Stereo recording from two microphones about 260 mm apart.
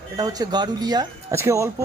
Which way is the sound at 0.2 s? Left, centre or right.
Centre.